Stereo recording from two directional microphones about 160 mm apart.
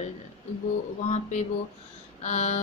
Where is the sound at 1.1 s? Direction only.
50° left (ahead or behind).